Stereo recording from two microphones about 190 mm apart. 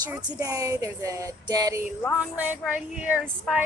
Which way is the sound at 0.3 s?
15° right (ahead or behind).